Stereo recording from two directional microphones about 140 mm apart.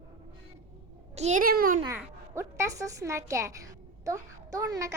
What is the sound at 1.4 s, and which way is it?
Speech, 90° right.